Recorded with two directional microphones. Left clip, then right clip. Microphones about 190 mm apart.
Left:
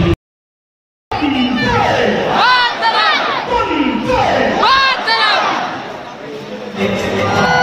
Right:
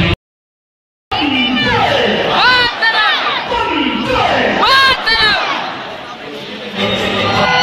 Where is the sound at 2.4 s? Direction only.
10° right (ahead or behind).